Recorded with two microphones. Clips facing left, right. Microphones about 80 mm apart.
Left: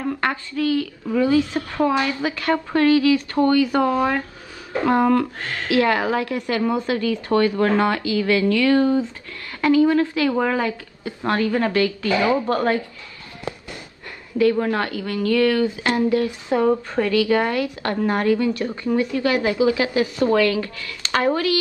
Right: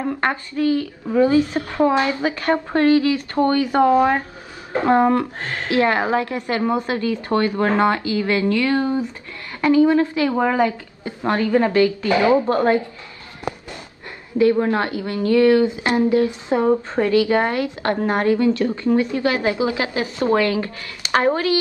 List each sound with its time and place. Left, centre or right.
0.0 s a woman's voice: right
14.4 s a woman's voice: right